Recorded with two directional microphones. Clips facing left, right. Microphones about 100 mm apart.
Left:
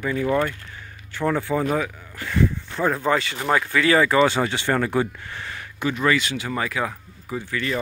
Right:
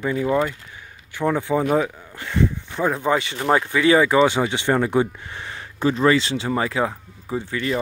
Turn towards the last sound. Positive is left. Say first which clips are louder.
# right 2 dB
turn(degrees=-25)  # may be behind; listen again after turning